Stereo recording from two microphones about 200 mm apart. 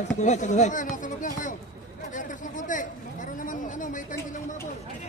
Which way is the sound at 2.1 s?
40° left (ahead or behind).